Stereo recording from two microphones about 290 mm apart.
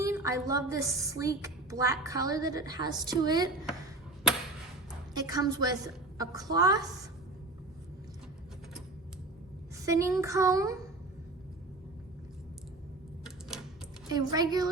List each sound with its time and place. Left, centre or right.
0.0 s a woman's voice: centre
5.1 s a woman's voice: centre
9.8 s a woman's voice: centre
14.1 s a woman's voice: centre